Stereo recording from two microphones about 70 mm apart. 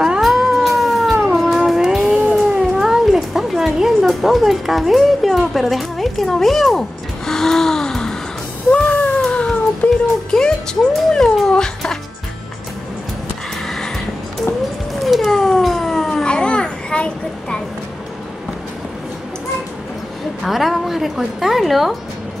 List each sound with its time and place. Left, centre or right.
0.0 s cat: centre
9.2 s cat: centre
9.8 s music: left
10.3 s music: centre
13.7 s music: centre
15.0 s a sound: centre
20.4 s a woman's voice: centre